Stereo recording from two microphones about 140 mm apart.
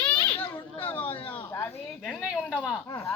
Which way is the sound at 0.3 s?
40° left (ahead or behind).